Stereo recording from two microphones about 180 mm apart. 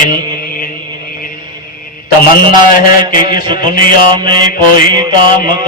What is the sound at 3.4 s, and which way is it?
Mantra, 25° right (ahead or behind).